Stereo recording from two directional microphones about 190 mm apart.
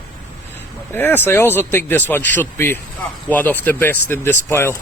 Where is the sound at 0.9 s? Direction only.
10° left (ahead or behind).